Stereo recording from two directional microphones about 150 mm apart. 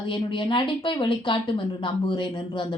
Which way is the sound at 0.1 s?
35° left (ahead or behind).